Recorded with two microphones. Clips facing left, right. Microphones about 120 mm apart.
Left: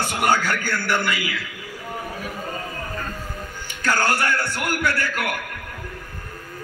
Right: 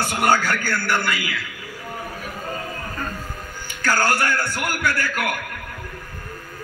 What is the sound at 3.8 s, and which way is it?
A man's voice, 25° left (ahead or behind).